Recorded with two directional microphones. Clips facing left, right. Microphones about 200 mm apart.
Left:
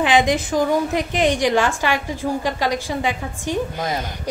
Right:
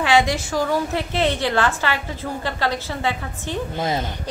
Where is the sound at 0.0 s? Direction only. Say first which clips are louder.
Left 1 dB; 20° left (ahead or behind).